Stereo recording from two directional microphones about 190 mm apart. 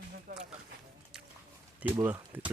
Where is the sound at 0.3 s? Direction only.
50° right (ahead or behind).